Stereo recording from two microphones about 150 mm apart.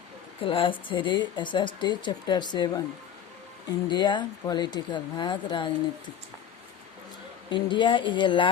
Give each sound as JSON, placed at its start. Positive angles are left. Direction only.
{"t": 0.4, "sound": "speech", "side_deg": 35}
{"t": 3.8, "sound": "speech", "side_deg": 30}
{"t": 7.5, "sound": "speech", "side_deg": 30}